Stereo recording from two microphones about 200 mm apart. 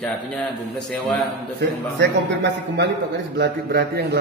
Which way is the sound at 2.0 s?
60° right (ahead or behind).